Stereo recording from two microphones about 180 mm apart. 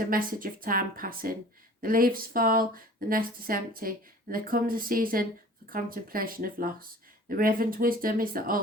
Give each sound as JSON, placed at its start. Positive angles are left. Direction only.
{"t": 0.0, "sound": "speech", "side_deg": -50}